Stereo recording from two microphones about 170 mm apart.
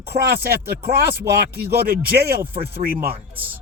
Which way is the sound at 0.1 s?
75° right (ahead or behind).